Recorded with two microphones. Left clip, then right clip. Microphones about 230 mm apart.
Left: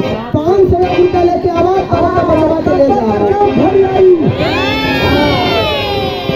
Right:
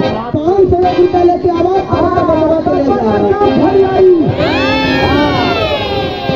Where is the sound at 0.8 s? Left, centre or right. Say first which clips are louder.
Right 1 dB; centre.